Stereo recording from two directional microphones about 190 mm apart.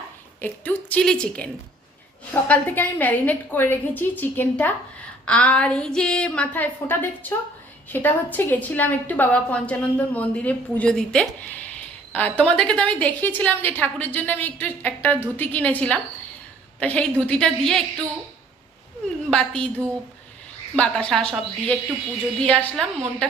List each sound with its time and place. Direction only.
0.4 s a woman's voice: 10° left (ahead or behind)
19.3 s a woman's voice: 5° left (ahead or behind)
20.7 s a woman's voice: 5° left (ahead or behind)